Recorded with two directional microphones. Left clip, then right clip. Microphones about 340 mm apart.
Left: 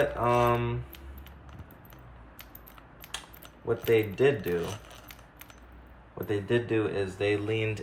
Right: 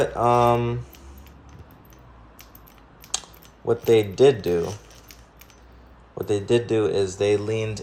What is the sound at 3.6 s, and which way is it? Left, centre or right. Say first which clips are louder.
Speech: right 7 dB; centre.